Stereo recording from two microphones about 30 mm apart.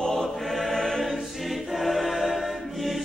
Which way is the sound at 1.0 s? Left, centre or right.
Centre.